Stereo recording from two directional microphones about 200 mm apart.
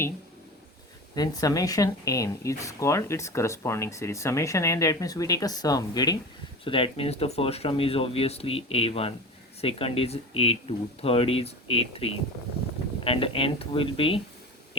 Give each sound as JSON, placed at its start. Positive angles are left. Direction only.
{"t": 1.1, "sound": "speech", "side_deg": 20}